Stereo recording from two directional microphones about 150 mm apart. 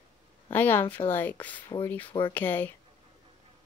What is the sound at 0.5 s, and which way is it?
Speech, 15° left (ahead or behind).